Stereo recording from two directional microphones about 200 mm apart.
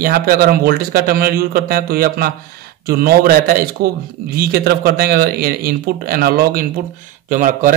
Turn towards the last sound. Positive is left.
turn(degrees=-40)  # may be behind; listen again after turning